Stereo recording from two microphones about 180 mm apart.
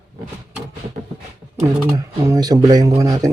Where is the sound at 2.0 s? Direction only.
20° right (ahead or behind).